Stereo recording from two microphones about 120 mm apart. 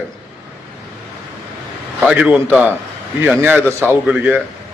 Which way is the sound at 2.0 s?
10° right (ahead or behind).